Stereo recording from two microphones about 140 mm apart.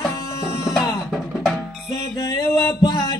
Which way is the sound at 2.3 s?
30° left (ahead or behind).